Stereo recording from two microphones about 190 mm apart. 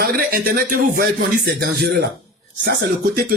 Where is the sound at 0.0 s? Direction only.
50° right (ahead or behind).